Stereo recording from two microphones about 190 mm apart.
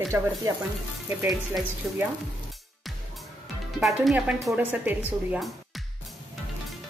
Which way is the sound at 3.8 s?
Centre (ahead or behind).